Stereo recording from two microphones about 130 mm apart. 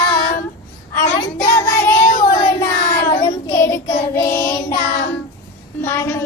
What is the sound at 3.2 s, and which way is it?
Child singing, 25° left (ahead or behind).